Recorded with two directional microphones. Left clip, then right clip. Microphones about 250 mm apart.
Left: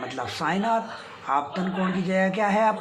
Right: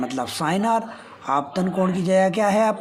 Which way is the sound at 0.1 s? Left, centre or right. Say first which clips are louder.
Right 3 dB; right.